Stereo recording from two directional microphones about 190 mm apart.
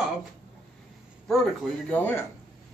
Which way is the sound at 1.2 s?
5° left (ahead or behind).